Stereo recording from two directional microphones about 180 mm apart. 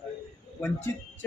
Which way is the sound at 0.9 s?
15° left (ahead or behind).